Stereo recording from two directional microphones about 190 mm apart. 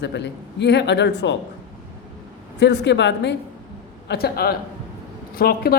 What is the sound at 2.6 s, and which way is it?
Speech, 65° left (ahead or behind).